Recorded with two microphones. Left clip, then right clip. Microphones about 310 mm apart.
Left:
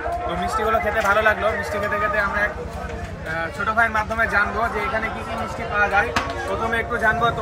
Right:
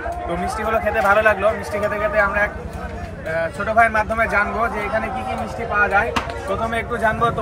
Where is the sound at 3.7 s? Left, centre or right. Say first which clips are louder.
Right 4 dB; centre.